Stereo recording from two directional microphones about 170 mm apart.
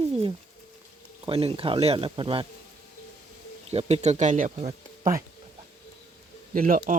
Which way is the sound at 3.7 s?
40° right (ahead or behind).